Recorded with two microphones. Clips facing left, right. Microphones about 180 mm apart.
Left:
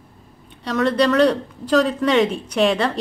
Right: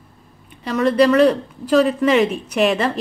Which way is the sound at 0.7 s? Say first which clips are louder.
Right 3 dB; 5° right (ahead or behind).